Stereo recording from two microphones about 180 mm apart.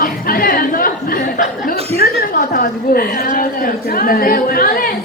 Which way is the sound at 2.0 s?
50° left (ahead or behind).